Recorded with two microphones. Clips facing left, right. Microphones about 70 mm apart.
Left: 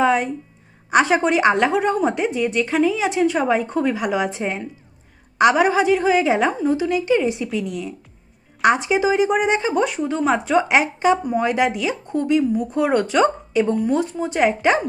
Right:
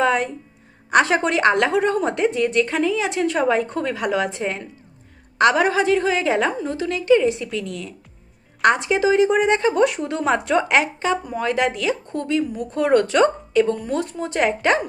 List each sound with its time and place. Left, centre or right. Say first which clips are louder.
0.0 s a woman's voice: left 2 dB; centre